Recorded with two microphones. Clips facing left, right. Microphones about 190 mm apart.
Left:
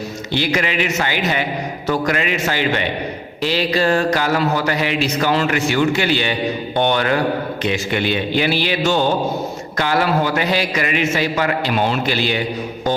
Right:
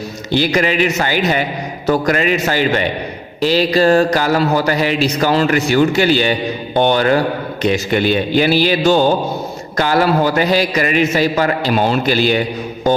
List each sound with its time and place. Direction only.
0.3 s a man's voice: 40° right (ahead or behind)